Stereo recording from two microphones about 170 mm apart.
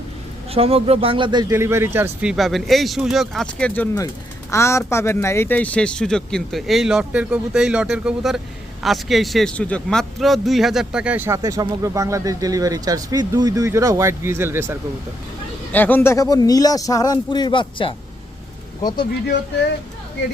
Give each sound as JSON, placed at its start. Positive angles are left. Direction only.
{"t": 0.5, "sound": "speech", "side_deg": -35}
{"t": 2.3, "sound": "speech", "side_deg": 0}
{"t": 4.5, "sound": "speech", "side_deg": 15}
{"t": 15.7, "sound": "speech", "side_deg": 10}